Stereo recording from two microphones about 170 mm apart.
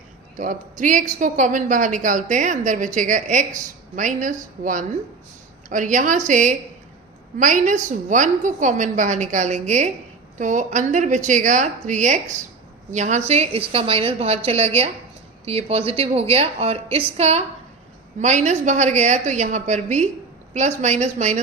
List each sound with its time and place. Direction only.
0.3 s a woman's voice: 50° right (ahead or behind)